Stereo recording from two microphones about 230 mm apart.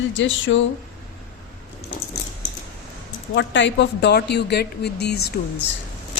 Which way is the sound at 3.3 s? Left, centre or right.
Left.